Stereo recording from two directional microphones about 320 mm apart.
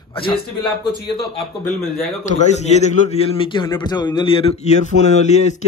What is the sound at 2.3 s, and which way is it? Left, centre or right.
A man's voice, left.